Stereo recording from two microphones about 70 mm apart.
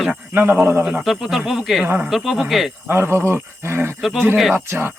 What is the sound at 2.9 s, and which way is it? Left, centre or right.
Speech, right.